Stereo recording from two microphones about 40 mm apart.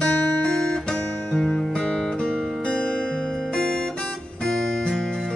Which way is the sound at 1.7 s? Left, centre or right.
Centre.